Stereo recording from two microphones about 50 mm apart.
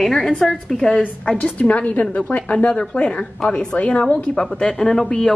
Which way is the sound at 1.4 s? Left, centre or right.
Left.